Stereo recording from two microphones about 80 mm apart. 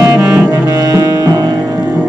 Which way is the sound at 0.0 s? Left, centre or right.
Right.